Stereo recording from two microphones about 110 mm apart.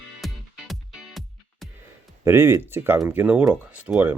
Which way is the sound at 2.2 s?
20° right (ahead or behind).